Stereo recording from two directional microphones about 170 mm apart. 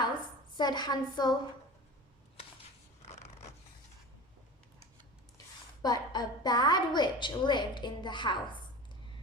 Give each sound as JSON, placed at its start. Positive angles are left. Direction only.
{"t": 0.5, "sound": "a woman's voice", "side_deg": 25}
{"t": 3.0, "sound": "a sound", "side_deg": 40}
{"t": 5.8, "sound": "a woman's voice", "side_deg": 25}